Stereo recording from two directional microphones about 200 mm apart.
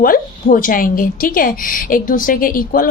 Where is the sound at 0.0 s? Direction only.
45° left (ahead or behind).